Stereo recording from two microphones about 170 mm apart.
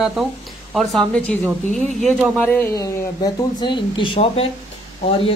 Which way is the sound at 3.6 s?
30° left (ahead or behind).